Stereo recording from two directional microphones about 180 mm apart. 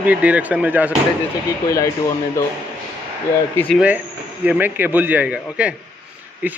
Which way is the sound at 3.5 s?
5° left (ahead or behind).